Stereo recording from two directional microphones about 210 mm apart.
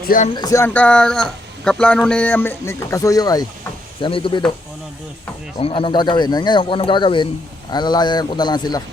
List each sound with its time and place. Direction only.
0.3 s speech: 15° left (ahead or behind)
5.5 s speech: 25° left (ahead or behind)